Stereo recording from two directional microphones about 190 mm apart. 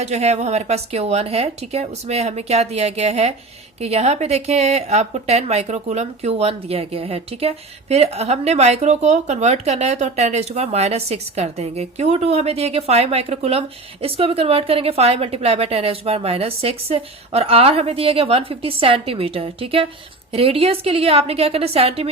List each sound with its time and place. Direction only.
0.0 s a woman's voice: 35° right (ahead or behind)